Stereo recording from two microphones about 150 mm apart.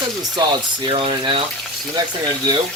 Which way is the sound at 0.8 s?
35° right (ahead or behind).